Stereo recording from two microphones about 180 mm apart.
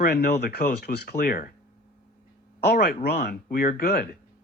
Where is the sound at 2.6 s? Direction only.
65° left (ahead or behind).